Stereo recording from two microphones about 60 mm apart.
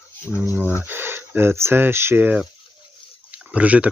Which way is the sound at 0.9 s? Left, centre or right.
Right.